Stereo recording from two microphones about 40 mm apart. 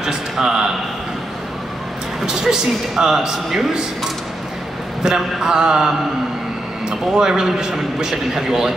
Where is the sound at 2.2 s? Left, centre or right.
Centre.